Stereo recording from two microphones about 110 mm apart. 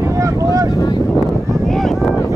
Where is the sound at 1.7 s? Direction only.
Centre (ahead or behind).